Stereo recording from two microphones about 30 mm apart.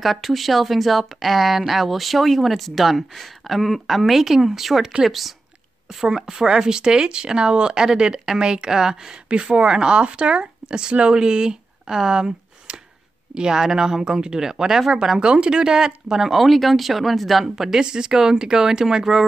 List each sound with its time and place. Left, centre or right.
0.0 s speech: centre
6.0 s speech: right
9.3 s speech: right
12.1 s a sound: right
13.3 s speech: right
15.1 s speech: right
16.3 s speech: centre
17.6 s speech: centre
17.8 s speech: right